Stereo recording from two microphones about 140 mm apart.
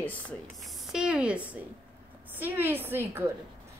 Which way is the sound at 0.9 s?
5° right (ahead or behind).